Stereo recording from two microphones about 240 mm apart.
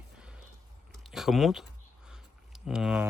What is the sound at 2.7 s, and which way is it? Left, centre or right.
Speech, centre.